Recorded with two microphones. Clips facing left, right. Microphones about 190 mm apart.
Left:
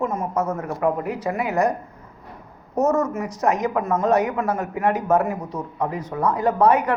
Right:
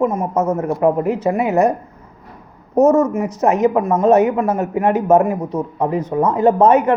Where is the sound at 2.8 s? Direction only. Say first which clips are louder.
Right 7 dB; 20° right (ahead or behind).